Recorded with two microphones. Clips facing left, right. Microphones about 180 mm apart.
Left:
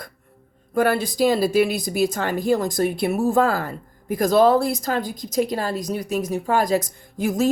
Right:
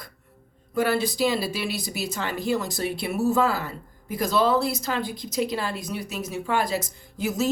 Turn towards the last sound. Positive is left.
turn(degrees=50)  # may be behind; listen again after turning